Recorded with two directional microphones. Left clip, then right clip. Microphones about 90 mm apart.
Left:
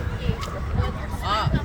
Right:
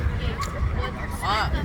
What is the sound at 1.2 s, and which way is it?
Speech, centre (ahead or behind).